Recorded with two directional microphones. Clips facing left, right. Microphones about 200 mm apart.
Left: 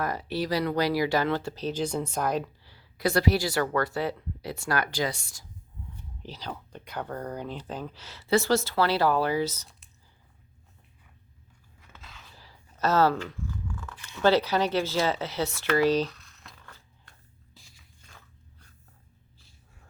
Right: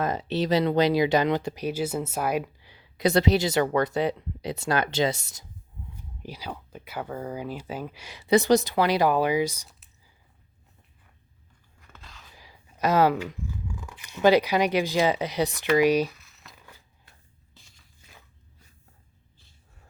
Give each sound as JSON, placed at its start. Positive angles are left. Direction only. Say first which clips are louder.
{"t": 0.0, "sound": "speech", "louder": "right 3 dB", "side_deg": -20}
{"t": 6.2, "sound": "speech", "louder": "right 1 dB", "side_deg": -10}
{"t": 11.8, "sound": "a sound", "louder": "even", "side_deg": 0}
{"t": 12.3, "sound": "speech", "louder": "right 1 dB", "side_deg": -15}
{"t": 16.6, "sound": "crushing", "louder": "even", "side_deg": -10}